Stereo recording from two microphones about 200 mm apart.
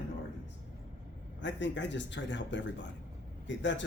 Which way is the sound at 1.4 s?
65° left (ahead or behind).